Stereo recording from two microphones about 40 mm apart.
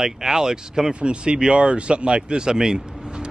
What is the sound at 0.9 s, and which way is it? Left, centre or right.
Speech, right.